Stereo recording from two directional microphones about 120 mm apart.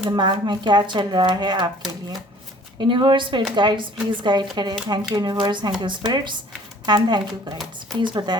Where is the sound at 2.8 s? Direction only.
40° right (ahead or behind).